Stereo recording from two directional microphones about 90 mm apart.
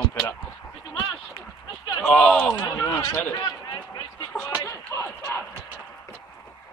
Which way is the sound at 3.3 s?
45° left (ahead or behind).